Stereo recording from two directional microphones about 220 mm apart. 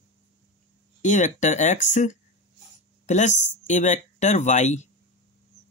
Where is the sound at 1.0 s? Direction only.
35° left (ahead or behind).